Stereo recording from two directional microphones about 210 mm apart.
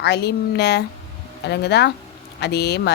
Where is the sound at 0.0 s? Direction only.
50° left (ahead or behind).